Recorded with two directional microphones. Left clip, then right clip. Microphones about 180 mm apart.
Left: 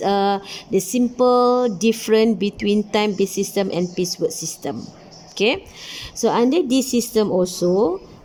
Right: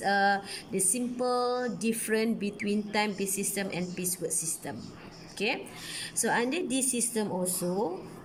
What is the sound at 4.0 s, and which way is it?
Speech, 15° left (ahead or behind).